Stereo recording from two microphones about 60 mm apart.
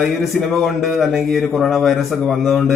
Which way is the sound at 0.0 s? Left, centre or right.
Centre.